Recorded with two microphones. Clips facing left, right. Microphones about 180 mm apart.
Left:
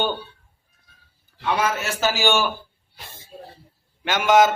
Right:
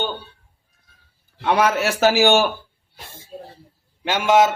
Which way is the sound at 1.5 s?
65° right (ahead or behind).